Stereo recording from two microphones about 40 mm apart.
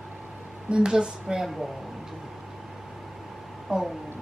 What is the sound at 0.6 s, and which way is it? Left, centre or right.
Speech, right.